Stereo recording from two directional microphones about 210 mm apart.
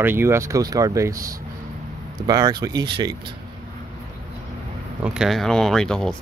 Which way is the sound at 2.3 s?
20° right (ahead or behind).